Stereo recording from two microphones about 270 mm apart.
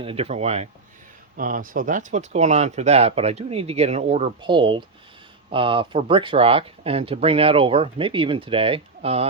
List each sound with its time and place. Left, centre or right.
0.0 s speech: right